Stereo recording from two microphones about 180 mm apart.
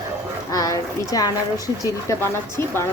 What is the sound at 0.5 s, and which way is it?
A woman's voice, 20° left (ahead or behind).